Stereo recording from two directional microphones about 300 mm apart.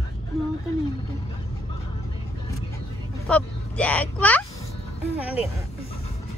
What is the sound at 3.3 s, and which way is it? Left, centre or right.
Speech, centre.